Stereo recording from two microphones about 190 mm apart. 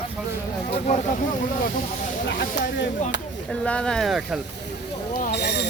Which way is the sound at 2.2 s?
65° left (ahead or behind).